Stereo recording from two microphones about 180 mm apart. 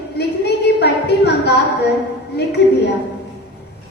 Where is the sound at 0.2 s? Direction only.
65° left (ahead or behind).